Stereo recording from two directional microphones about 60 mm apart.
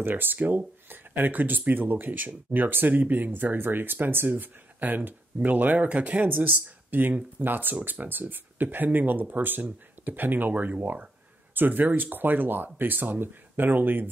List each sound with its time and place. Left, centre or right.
0.0 s speech: right